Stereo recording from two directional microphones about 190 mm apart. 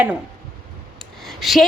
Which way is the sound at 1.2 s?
Centre (ahead or behind).